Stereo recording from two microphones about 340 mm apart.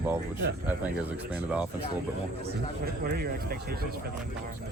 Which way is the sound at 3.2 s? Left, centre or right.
Right.